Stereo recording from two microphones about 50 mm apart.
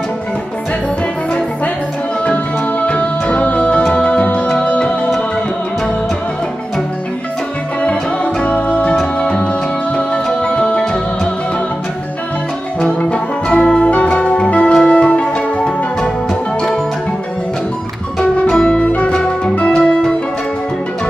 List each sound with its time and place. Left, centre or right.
2.2 s music: left
7.8 s music: left
12.8 s music: left
18.5 s music: centre
18.9 s music: left
19.8 s music: centre